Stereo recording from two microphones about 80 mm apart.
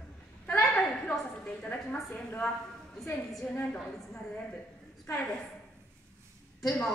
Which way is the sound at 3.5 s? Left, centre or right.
Centre.